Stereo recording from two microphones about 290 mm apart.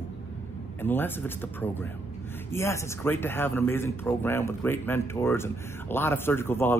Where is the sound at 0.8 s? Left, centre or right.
Centre.